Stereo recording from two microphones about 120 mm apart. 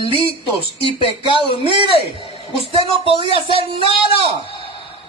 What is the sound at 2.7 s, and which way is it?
Speech, 50° right (ahead or behind).